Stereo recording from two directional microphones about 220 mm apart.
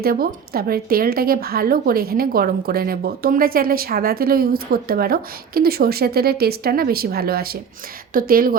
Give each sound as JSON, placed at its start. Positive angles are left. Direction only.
{"t": 0.0, "sound": "a woman's voice", "side_deg": -45}